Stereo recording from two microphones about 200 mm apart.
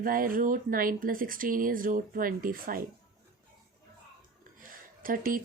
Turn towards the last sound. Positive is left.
turn(degrees=-45)  # may be behind; listen again after turning